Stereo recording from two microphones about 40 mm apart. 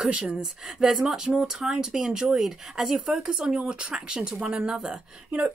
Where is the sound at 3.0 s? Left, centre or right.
Right.